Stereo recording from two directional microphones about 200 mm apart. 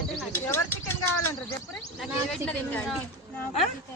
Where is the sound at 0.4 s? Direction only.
10° left (ahead or behind).